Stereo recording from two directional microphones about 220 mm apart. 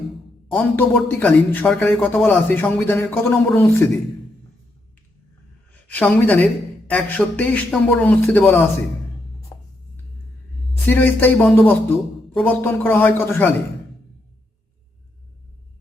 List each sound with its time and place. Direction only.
0.5 s speech: 5° left (ahead or behind)
5.9 s speech: 5° left (ahead or behind)
9.5 s writing: 10° left (ahead or behind)
10.8 s speech: 10° left (ahead or behind)